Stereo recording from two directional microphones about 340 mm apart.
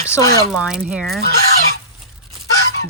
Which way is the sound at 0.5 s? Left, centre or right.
Centre.